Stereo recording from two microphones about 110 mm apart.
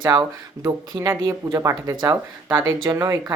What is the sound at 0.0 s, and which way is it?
Speech, 40° right (ahead or behind).